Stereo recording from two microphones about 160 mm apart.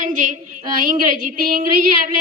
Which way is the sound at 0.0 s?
55° right (ahead or behind).